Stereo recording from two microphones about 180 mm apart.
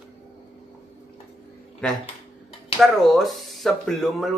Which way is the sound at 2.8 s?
Centre (ahead or behind).